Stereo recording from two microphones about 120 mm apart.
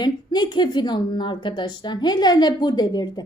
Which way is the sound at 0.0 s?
35° left (ahead or behind).